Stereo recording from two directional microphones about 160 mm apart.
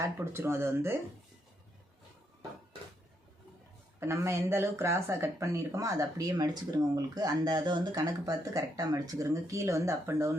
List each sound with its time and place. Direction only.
0.0 s speech: 15° right (ahead or behind)
4.0 s speech: 15° right (ahead or behind)